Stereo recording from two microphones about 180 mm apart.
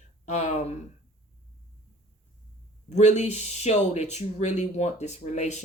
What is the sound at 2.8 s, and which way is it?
Speech, 40° left (ahead or behind).